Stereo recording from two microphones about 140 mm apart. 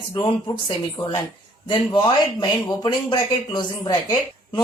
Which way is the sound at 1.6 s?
30° left (ahead or behind).